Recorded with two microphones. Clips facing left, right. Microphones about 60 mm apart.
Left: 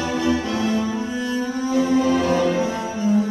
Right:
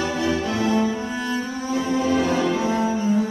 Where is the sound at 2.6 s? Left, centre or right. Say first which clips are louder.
Right 2 dB; right.